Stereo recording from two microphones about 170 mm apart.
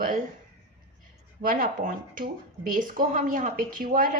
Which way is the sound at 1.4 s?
55° right (ahead or behind).